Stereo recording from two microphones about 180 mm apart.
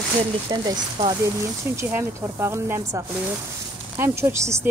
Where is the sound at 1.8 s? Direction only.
15° right (ahead or behind).